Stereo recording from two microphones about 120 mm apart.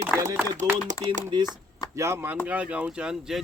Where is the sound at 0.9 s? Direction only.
90° right.